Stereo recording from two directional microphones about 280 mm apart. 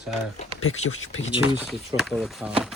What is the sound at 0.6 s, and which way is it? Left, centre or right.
Speech, left.